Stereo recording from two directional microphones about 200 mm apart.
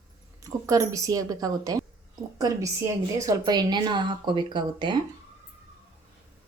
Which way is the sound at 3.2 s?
20° right (ahead or behind).